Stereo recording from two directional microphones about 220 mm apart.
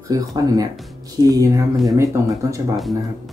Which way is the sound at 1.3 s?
15° right (ahead or behind).